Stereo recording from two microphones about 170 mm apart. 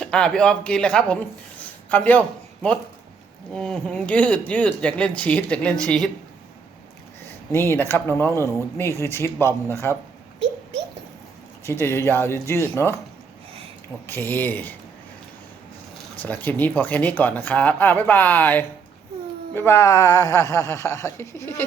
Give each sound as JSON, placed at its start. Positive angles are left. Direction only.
{"t": 0.0, "sound": "speech", "side_deg": 5}
{"t": 3.5, "sound": "speech", "side_deg": 5}
{"t": 7.5, "sound": "speech", "side_deg": 15}
{"t": 11.8, "sound": "speech", "side_deg": 15}
{"t": 14.1, "sound": "speech", "side_deg": 10}
{"t": 16.2, "sound": "speech", "side_deg": 10}